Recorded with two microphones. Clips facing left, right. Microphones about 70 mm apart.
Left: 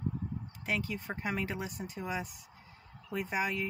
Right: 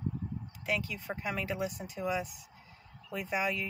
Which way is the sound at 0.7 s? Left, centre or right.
Left.